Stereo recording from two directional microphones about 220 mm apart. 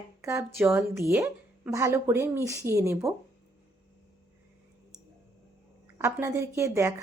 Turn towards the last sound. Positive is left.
turn(degrees=-15)  # may be behind; listen again after turning